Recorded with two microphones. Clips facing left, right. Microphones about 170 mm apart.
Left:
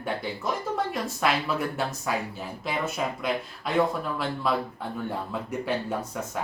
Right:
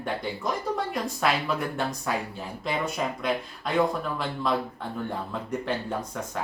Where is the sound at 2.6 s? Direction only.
5° left (ahead or behind).